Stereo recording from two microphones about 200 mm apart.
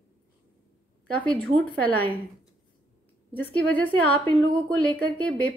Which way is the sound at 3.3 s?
5° left (ahead or behind).